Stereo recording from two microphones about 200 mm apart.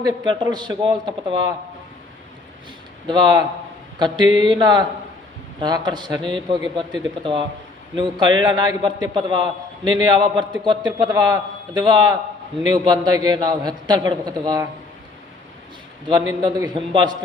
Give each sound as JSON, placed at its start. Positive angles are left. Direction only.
{"t": 0.0, "sound": "a man's voice", "side_deg": -20}
{"t": 3.1, "sound": "a man's voice", "side_deg": -20}
{"t": 16.4, "sound": "a man's voice", "side_deg": -20}